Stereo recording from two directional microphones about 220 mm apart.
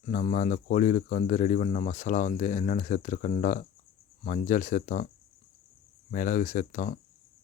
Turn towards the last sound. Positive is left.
turn(degrees=35)  # may be behind; listen again after turning